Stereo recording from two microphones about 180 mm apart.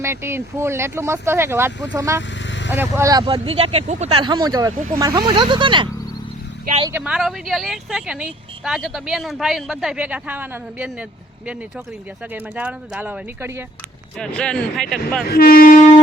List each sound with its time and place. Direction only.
0.0 s speech: 15° right (ahead or behind)
2.4 s vehicle: 85° left
2.6 s speech: 10° right (ahead or behind)
6.9 s a woman's voice: 5° right (ahead or behind)
12.3 s speech: 10° right (ahead or behind)
14.2 s a woman's voice: 5° left (ahead or behind)
15.3 s speech: 55° left (ahead or behind)